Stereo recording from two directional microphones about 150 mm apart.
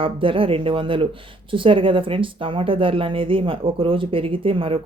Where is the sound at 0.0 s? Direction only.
35° right (ahead or behind).